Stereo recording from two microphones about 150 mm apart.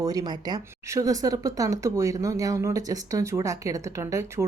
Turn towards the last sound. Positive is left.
turn(degrees=-20)  # may be behind; listen again after turning